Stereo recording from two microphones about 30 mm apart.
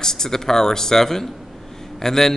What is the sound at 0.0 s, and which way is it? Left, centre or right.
A man's voice, centre.